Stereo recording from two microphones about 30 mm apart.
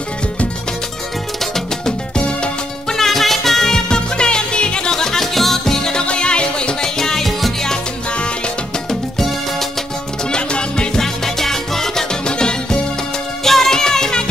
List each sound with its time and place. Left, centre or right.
1.4 s music: centre
2.1 s music: left
2.9 s music: centre
3.7 s music: left
4.9 s music: centre
6.0 s music: left
6.8 s music: centre
10.3 s music: left
11.0 s music: centre
12.3 s music: left
13.4 s music: centre